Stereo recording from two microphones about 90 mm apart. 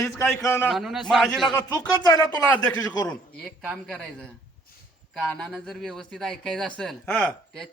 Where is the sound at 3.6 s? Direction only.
5° left (ahead or behind).